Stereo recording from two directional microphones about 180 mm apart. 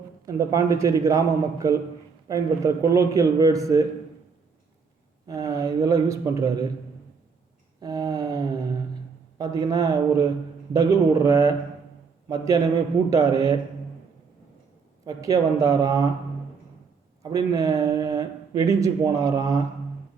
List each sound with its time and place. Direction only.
0.3 s speech: 20° right (ahead or behind)
5.2 s speech: 20° right (ahead or behind)
7.8 s a sound: 20° right (ahead or behind)
9.4 s speech: 20° right (ahead or behind)
13.1 s speech: 20° right (ahead or behind)
15.0 s speech: 20° right (ahead or behind)
17.2 s speech: 20° right (ahead or behind)